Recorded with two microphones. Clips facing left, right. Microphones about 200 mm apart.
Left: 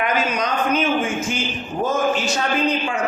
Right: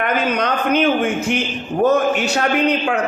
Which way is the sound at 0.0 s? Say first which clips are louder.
Right 3 dB; 60° right (ahead or behind).